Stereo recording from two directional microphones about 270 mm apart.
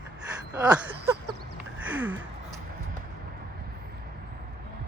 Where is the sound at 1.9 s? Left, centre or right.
Centre.